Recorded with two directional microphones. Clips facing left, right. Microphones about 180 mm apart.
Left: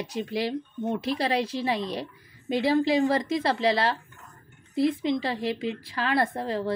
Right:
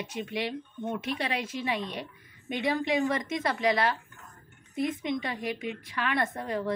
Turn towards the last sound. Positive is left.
turn(degrees=30)  # may be behind; listen again after turning